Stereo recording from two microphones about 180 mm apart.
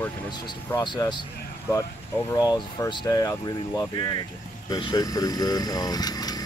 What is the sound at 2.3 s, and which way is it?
Speech, 20° left (ahead or behind).